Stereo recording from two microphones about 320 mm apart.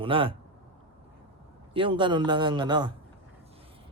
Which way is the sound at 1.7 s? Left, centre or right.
Centre.